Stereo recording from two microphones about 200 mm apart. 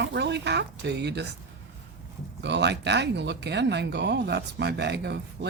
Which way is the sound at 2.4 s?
60° right (ahead or behind).